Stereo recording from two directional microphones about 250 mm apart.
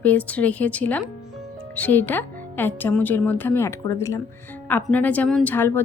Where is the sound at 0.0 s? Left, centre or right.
Centre.